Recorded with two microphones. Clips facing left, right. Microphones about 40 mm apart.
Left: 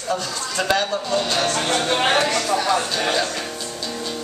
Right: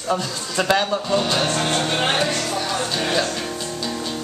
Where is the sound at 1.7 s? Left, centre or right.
Left.